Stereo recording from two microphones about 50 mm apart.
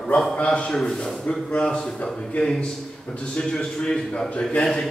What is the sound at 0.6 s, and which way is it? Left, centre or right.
Speech, centre.